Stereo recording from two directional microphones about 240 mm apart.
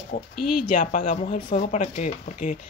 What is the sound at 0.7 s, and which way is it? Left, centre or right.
Speech, left.